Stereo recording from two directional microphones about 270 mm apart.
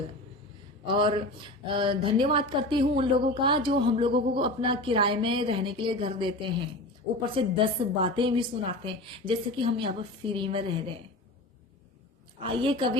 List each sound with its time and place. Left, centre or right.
0.9 s a woman's voice: centre
12.4 s a woman's voice: centre